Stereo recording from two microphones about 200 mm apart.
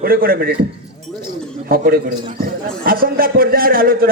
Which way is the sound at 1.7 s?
50° right (ahead or behind).